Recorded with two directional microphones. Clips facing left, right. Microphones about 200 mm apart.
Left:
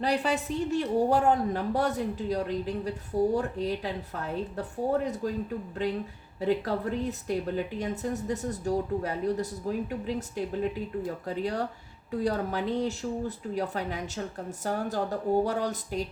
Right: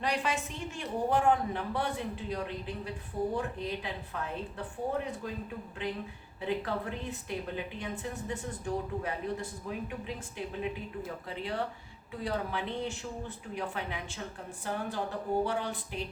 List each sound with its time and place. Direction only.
0.0 s speech: 35° left (ahead or behind)
6.4 s speech: 40° left (ahead or behind)